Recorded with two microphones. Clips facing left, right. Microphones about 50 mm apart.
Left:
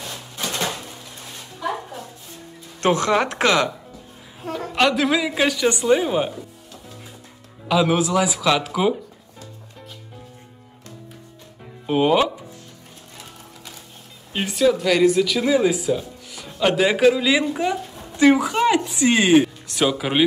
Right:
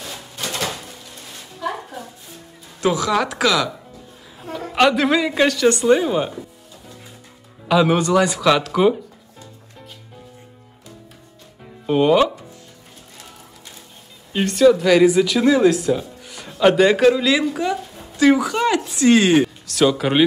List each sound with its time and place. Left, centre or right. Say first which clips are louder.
2.8 s speech: even; left
3.3 s speech: even; left
4.7 s speech: right 3 dB; centre
7.6 s speech: right 2 dB; centre
11.6 s music: right 2 dB; centre
14.3 s speech: right 5 dB; centre
17.3 s speech: right 1 dB; centre